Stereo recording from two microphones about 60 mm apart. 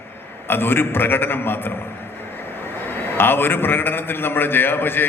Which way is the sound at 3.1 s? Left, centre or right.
Left.